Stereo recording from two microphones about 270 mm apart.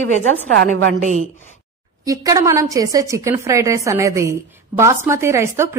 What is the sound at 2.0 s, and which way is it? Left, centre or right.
A woman's voice, centre.